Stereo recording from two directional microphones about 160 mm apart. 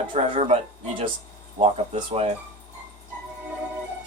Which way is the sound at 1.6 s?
40° right (ahead or behind).